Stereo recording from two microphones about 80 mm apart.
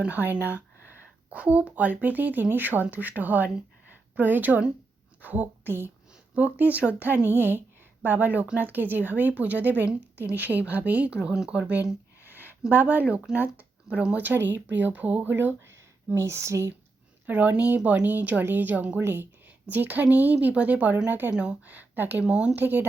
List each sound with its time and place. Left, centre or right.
0.0 s a woman's voice: right
12.3 s a sound: right
12.7 s speech: right
16.1 s a sound: right
17.2 s speech: centre
19.0 s a sound: right
19.7 s speech: right
22.3 s speech: centre
22.5 s speech: right